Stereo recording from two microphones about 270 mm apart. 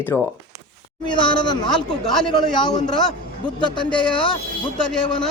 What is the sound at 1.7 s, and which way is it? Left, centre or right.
Speech, centre.